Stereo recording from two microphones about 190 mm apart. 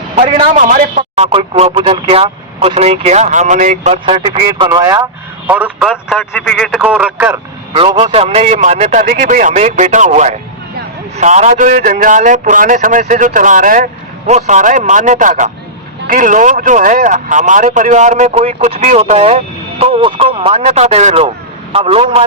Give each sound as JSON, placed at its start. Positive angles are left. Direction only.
{"t": 0.2, "sound": "speech", "side_deg": -30}
{"t": 0.6, "sound": "speech", "side_deg": -45}
{"t": 6.8, "sound": "speech", "side_deg": -5}
{"t": 7.7, "sound": "a man's voice", "side_deg": -30}